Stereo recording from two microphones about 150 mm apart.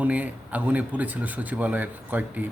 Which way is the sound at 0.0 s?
10° right (ahead or behind).